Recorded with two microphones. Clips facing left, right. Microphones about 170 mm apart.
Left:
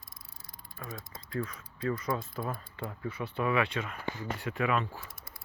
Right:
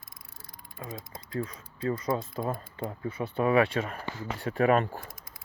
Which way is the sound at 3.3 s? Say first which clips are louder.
Right 6 dB; 40° right (ahead or behind).